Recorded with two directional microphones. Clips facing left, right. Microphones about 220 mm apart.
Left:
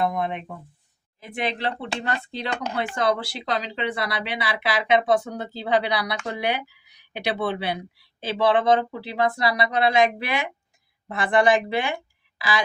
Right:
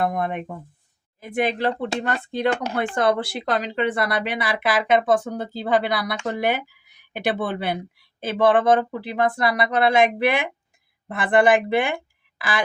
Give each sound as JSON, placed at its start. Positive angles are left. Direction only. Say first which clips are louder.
{"t": 0.0, "sound": "speech", "louder": "right 1 dB", "side_deg": -50}